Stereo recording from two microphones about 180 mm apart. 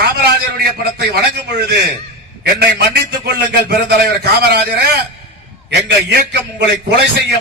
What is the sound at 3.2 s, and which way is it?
Speech, 65° right (ahead or behind).